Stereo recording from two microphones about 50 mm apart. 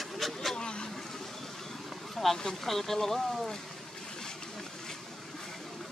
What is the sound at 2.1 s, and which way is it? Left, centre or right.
Speech, centre.